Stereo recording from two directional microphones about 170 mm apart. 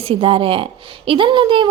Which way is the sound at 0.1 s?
30° right (ahead or behind).